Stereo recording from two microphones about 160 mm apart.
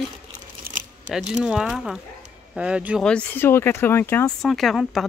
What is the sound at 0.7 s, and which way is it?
Crumpling, 65° right (ahead or behind).